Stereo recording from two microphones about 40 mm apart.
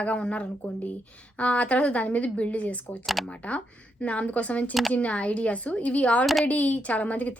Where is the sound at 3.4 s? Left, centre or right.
Left.